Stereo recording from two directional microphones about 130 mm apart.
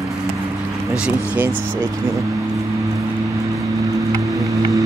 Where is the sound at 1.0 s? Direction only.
10° right (ahead or behind).